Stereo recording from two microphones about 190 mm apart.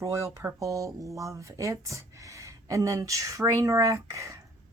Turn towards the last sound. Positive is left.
turn(degrees=-15)  # may be behind; listen again after turning